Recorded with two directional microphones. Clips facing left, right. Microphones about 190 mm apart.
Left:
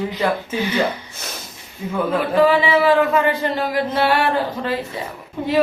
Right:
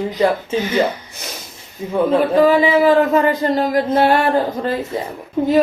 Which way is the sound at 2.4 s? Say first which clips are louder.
Right 1 dB; 40° right (ahead or behind).